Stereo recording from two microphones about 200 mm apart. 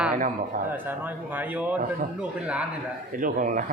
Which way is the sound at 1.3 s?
10° right (ahead or behind).